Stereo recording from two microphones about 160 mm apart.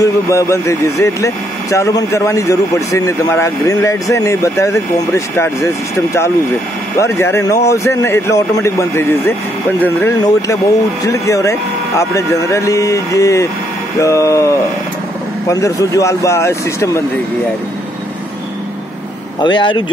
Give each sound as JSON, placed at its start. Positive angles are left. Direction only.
{"t": 0.0, "sound": "a man's voice", "side_deg": 20}
{"t": 19.4, "sound": "speech", "side_deg": 30}